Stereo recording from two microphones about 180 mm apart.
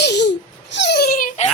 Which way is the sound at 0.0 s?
70° left (ahead or behind).